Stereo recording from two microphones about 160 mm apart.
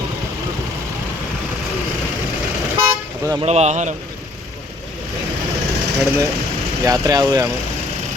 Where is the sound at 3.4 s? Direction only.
45° right (ahead or behind).